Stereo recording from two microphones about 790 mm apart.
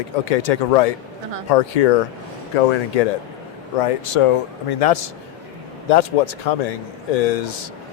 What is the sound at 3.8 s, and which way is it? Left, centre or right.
Speech, left.